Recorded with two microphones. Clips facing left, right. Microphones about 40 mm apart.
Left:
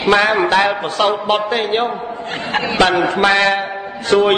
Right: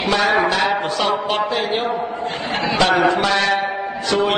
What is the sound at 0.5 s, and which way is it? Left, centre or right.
A man's voice, left.